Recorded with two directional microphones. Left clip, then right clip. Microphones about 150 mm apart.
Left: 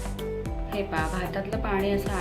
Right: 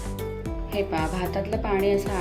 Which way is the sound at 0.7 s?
35° right (ahead or behind).